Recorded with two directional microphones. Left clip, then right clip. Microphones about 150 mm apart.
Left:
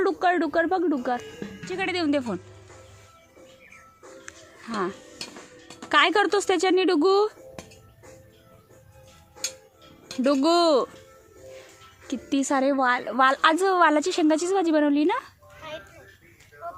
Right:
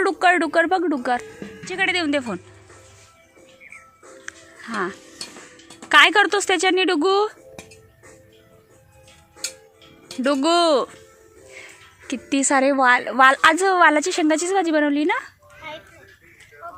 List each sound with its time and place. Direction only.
0.0 s speech: 20° right (ahead or behind)
1.6 s a woman's voice: centre (ahead or behind)
4.3 s music: 5° right (ahead or behind)
5.9 s a woman's voice: 5° right (ahead or behind)
10.2 s a woman's voice: centre (ahead or behind)
12.0 s a woman's voice: 20° right (ahead or behind); by 15.3 s 5° right (ahead or behind)